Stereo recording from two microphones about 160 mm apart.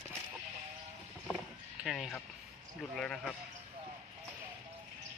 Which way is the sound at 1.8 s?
Centre (ahead or behind).